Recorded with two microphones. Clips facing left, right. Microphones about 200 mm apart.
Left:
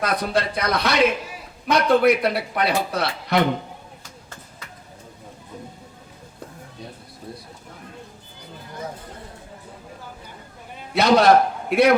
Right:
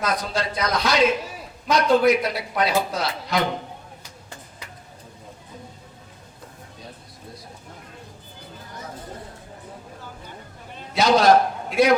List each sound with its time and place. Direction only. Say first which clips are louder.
0.0 s a man's voice: left 3 dB; 60° left (ahead or behind)
10.9 s a man's voice: left 1 dB; 60° left (ahead or behind)